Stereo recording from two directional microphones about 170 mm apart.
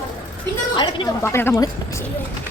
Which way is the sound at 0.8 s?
15° left (ahead or behind).